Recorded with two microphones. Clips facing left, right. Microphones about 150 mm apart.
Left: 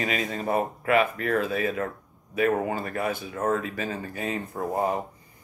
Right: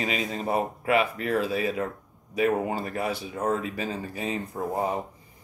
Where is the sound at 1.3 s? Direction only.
30° right (ahead or behind).